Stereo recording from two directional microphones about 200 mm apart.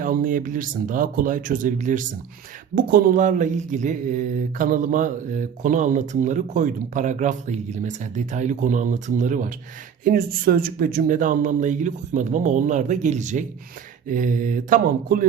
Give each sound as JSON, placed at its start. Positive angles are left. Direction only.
{"t": 0.0, "sound": "speech", "side_deg": -45}